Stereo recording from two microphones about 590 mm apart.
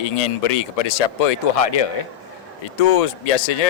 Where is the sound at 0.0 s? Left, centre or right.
Left.